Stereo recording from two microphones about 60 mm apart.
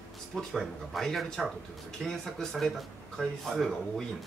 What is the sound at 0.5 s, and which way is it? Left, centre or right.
Speech, centre.